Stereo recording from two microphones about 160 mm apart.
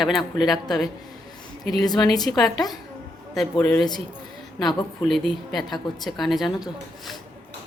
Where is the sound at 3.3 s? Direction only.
Centre (ahead or behind).